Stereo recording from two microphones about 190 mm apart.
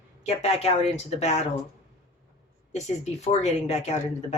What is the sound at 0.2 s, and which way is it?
Speech, 35° left (ahead or behind).